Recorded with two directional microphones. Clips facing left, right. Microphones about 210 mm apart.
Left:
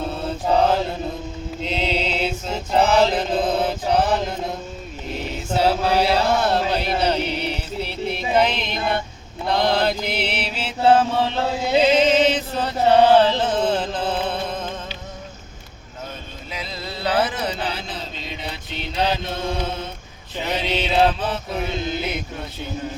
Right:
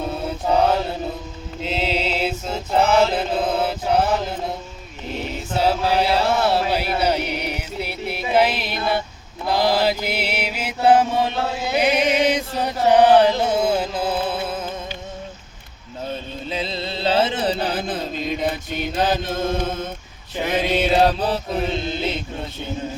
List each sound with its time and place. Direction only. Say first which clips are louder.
1.6 s mantra: right 1 dB; 5° right (ahead or behind)
2.8 s mantra: even; 35° left (ahead or behind)
3.1 s mantra: left 1 dB; 5° right (ahead or behind)
5.1 s chant: left 1 dB; centre (ahead or behind)
9.5 s mantra: right 1 dB; 5° right (ahead or behind)
11.8 s chant: left 2 dB; 15° right (ahead or behind)
16.5 s carnatic music: right 5 dB; 30° right (ahead or behind)
17.7 s mantra: right 6 dB; 50° right (ahead or behind); by 22.2 s 35° right (ahead or behind)